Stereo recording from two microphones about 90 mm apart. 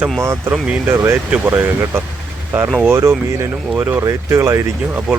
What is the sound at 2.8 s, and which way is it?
Speech, 35° right (ahead or behind).